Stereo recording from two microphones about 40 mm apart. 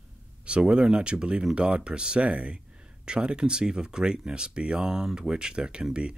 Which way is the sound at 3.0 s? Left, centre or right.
Right.